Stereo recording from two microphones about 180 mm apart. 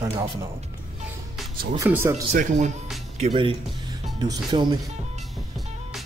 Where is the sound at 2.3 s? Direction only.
45° right (ahead or behind).